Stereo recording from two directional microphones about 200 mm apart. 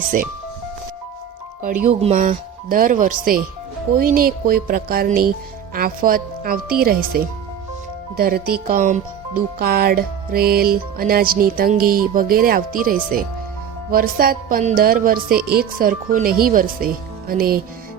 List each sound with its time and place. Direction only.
1.9 s speech: 30° right (ahead or behind)
2.1 s speech: 45° right (ahead or behind)